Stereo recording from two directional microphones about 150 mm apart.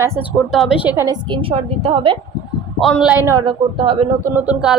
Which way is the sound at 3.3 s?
25° right (ahead or behind).